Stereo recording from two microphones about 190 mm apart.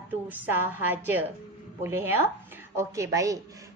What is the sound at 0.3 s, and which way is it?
A woman's voice, 10° right (ahead or behind).